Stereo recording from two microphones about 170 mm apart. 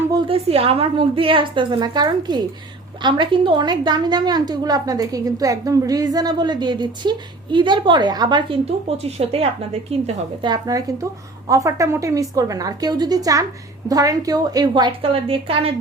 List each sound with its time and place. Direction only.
0.3 s a woman's voice: 35° right (ahead or behind)
10.4 s a woman's voice: 20° right (ahead or behind)